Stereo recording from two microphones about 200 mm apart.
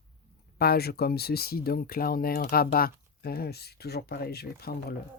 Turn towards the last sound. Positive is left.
turn(degrees=50)  # may be behind; listen again after turning